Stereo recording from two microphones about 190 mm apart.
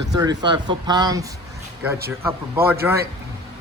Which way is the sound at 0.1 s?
20° right (ahead or behind).